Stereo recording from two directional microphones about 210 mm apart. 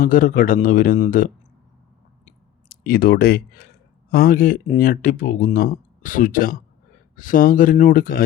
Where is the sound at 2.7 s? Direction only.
45° left (ahead or behind).